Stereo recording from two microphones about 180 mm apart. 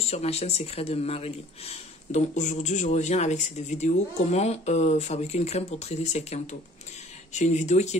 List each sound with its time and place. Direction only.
0.0 s speech: 35° left (ahead or behind)